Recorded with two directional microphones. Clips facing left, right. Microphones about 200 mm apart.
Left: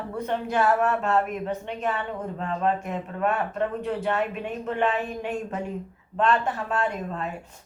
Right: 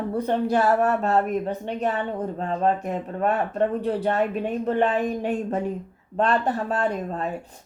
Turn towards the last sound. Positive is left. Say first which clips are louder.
# right 3 dB
turn(degrees=-35)  # may be behind; listen again after turning